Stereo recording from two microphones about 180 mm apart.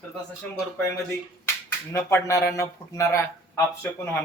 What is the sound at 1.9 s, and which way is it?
Speech, 15° left (ahead or behind).